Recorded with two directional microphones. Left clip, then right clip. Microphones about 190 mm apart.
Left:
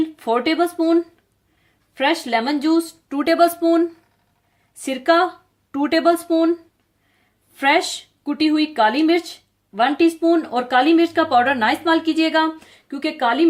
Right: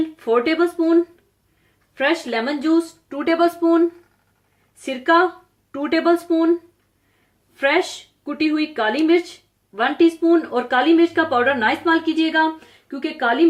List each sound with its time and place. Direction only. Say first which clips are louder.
0.2 s speech: right 2 dB; 55° left (ahead or behind)
2.0 s speech: left 1 dB; 55° left (ahead or behind)
4.8 s speech: even; 55° left (ahead or behind)
7.5 s speech: left 1 dB; 55° left (ahead or behind)